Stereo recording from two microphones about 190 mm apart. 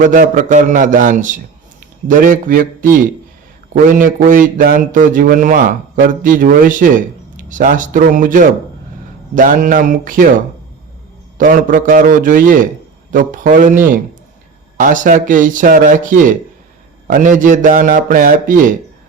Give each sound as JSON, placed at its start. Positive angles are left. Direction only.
{"t": 0.0, "sound": "a man's voice", "side_deg": -45}
{"t": 11.3, "sound": "a man's voice", "side_deg": -45}